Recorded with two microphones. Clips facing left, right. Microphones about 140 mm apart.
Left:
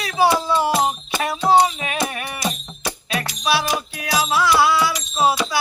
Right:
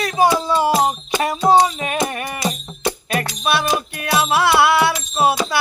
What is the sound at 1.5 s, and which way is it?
Music, 40° right (ahead or behind).